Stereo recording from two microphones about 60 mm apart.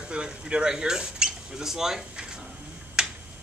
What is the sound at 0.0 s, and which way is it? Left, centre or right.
Speech, centre.